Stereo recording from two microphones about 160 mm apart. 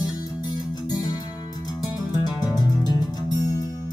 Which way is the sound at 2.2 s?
25° left (ahead or behind).